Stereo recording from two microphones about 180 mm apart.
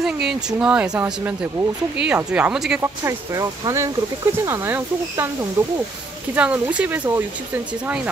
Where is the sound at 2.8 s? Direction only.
15° right (ahead or behind).